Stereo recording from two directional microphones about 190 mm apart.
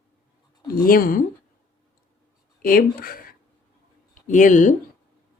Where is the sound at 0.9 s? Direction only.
50° left (ahead or behind).